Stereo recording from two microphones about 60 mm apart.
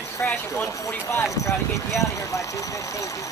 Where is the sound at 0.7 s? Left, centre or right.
Left.